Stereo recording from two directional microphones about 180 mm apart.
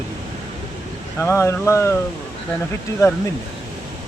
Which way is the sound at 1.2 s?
15° left (ahead or behind).